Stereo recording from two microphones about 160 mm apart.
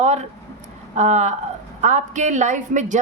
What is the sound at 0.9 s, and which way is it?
A woman's voice, 45° right (ahead or behind).